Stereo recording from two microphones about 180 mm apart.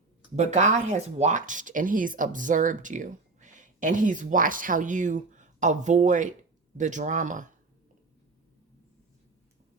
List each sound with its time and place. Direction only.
0.3 s speech: 40° right (ahead or behind)